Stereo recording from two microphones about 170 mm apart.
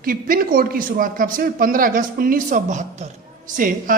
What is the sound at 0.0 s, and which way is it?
Speech, 55° right (ahead or behind).